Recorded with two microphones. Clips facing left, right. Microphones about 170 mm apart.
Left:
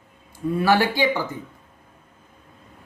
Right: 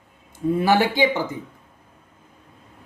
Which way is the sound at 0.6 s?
20° right (ahead or behind).